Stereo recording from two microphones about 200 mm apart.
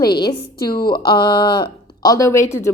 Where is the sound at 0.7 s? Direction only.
50° left (ahead or behind).